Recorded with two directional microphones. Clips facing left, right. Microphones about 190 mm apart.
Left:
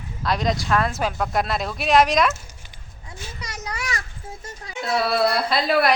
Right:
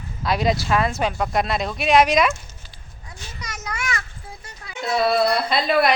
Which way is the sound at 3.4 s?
30° left (ahead or behind).